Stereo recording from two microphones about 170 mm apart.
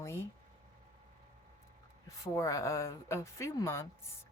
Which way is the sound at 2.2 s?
20° left (ahead or behind).